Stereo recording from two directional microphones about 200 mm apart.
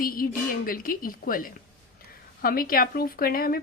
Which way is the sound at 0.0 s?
45° left (ahead or behind).